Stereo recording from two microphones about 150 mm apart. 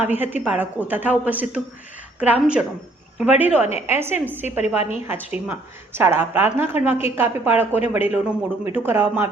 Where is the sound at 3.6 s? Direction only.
45° left (ahead or behind).